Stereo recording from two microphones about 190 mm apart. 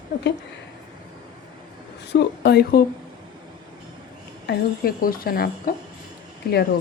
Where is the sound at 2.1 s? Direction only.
60° left (ahead or behind).